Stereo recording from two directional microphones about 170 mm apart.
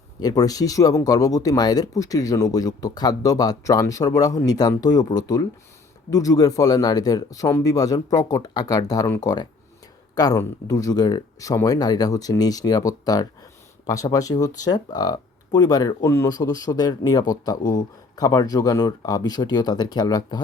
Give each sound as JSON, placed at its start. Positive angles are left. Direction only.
{"t": 0.2, "sound": "speech", "side_deg": 20}